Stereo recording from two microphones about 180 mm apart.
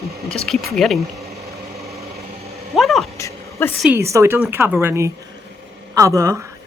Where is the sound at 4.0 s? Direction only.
15° right (ahead or behind).